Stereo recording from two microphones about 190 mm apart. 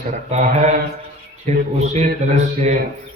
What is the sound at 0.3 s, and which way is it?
A man's voice, 35° right (ahead or behind).